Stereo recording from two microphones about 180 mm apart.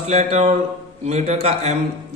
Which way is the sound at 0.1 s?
35° right (ahead or behind).